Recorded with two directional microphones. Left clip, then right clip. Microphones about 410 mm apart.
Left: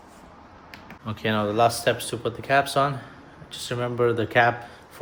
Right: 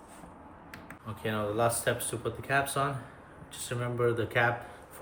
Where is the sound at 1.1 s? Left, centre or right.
Centre.